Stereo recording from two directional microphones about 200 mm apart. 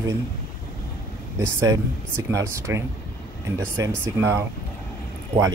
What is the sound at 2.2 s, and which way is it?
Speech, 15° right (ahead or behind).